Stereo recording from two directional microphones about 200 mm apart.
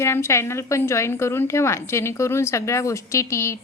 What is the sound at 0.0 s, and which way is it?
A woman's voice, 15° left (ahead or behind).